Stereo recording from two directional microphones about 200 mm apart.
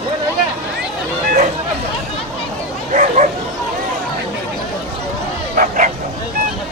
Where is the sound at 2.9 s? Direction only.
40° right (ahead or behind).